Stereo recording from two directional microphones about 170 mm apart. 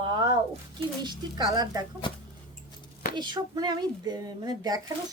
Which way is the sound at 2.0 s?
30° left (ahead or behind).